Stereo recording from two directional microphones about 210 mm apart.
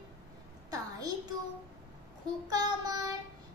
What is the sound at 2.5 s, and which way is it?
Speech, 15° right (ahead or behind).